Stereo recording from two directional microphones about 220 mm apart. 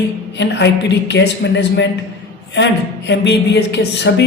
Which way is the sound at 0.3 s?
50° left (ahead or behind).